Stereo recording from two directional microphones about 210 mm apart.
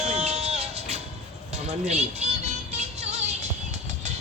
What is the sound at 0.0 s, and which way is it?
Music, 30° right (ahead or behind).